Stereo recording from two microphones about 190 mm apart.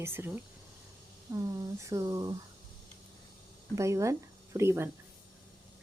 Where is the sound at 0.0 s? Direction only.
10° right (ahead or behind).